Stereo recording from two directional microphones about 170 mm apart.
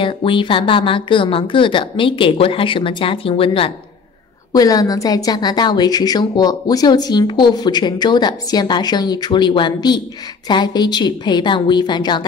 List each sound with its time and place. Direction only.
0.0 s speech: 30° left (ahead or behind)
4.5 s a woman's voice: 20° left (ahead or behind)